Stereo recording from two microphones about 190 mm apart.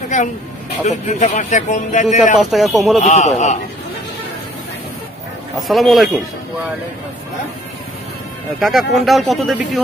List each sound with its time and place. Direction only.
0.8 s speech: 40° left (ahead or behind)
2.3 s speech: centre (ahead or behind)
3.0 s speech: 35° left (ahead or behind)
5.6 s speech: centre (ahead or behind)
8.5 s speech: centre (ahead or behind)